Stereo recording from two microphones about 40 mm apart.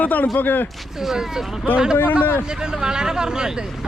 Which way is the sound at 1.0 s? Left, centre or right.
Centre.